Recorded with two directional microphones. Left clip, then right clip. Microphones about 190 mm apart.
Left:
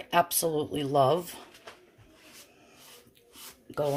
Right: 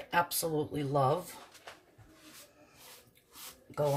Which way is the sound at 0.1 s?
35° left (ahead or behind).